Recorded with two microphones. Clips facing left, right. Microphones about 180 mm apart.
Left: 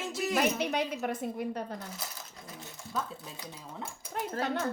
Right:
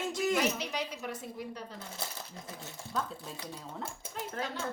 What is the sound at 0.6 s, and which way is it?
A woman's voice, 55° left (ahead or behind).